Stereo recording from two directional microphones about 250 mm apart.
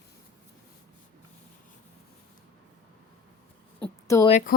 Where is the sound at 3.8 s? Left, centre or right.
Centre.